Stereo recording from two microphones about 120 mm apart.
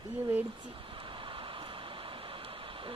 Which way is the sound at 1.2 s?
45° right (ahead or behind).